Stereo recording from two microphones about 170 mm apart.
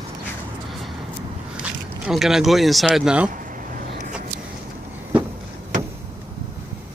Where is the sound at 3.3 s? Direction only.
50° right (ahead or behind).